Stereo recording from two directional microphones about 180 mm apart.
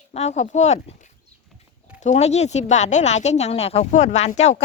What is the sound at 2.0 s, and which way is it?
Speech, 40° left (ahead or behind).